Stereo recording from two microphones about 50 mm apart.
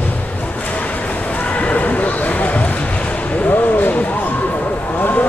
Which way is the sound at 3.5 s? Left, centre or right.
Left.